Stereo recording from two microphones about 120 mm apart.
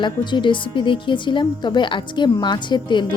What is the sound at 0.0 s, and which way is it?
A woman's voice, 40° left (ahead or behind).